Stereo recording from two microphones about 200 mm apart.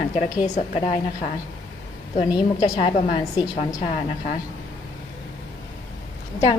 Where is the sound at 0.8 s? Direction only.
25° left (ahead or behind).